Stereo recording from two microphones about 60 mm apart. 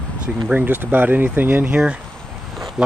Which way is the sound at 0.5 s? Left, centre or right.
Right.